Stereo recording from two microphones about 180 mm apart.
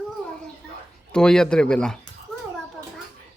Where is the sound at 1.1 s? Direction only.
5° left (ahead or behind).